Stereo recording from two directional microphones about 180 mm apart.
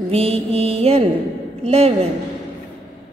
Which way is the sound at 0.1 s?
35° right (ahead or behind).